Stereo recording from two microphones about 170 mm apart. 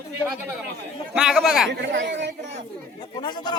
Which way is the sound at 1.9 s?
90° right.